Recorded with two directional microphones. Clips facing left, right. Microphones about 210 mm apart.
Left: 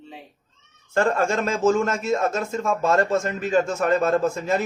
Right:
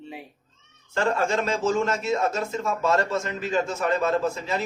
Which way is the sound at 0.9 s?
45° left (ahead or behind).